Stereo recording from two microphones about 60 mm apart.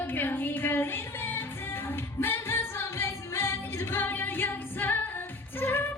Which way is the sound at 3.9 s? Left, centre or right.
Left.